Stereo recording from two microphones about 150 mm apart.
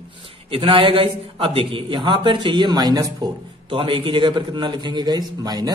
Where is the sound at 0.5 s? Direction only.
35° right (ahead or behind).